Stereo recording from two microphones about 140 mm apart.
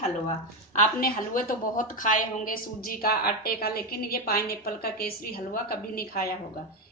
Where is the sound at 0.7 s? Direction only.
90° left.